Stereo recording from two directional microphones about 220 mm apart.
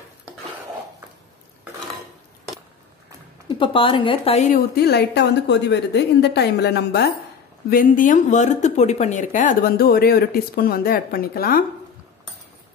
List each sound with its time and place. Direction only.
3.4 s speech: 20° left (ahead or behind)
4.7 s a woman's voice: 50° left (ahead or behind)
7.7 s speech: 35° left (ahead or behind)